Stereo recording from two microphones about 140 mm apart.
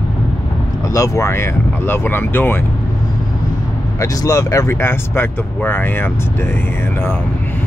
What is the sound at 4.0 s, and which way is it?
Speech, 25° left (ahead or behind).